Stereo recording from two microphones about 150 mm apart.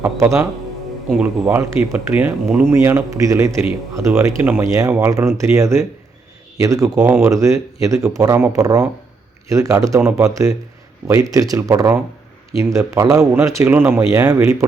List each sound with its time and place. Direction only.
0.0 s speech: 20° right (ahead or behind)
6.9 s speech: 10° right (ahead or behind)
7.3 s speech: 20° right (ahead or behind)